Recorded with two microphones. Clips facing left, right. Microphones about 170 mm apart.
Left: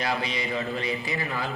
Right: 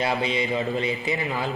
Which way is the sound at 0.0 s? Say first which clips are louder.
Right 4 dB; 25° right (ahead or behind).